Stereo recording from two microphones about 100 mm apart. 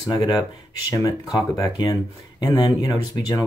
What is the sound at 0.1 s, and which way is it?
Speech, 40° left (ahead or behind).